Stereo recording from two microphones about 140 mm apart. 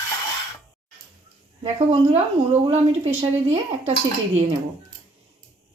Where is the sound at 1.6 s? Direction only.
50° right (ahead or behind).